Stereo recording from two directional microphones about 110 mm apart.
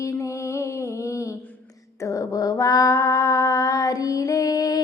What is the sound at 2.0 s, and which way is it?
Mantra, 30° left (ahead or behind).